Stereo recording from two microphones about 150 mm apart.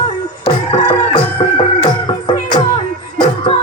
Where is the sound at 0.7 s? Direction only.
30° left (ahead or behind).